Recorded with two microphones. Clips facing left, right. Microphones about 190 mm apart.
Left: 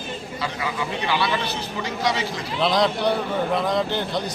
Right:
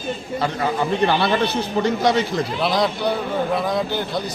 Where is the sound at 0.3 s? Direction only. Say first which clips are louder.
Right 6 dB; 50° right (ahead or behind).